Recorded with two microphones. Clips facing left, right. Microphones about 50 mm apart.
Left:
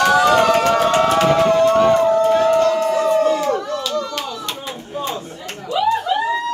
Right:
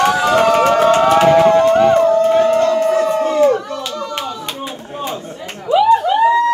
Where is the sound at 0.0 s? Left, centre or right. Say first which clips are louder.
Even; right.